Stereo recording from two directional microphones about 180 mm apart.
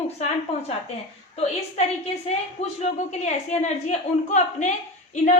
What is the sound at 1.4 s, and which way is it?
A woman's voice, 40° left (ahead or behind).